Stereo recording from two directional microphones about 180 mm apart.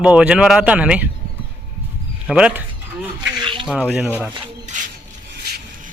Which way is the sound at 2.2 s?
5° right (ahead or behind).